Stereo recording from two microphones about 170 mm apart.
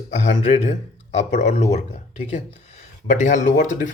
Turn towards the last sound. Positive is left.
turn(degrees=50)  # may be behind; listen again after turning